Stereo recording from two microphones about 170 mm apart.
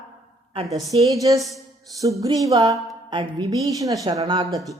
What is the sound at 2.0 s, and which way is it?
A woman's voice, 20° right (ahead or behind).